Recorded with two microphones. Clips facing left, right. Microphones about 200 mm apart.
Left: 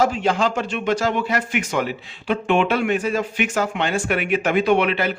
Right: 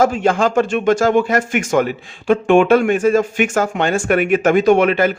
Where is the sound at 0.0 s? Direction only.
50° right (ahead or behind).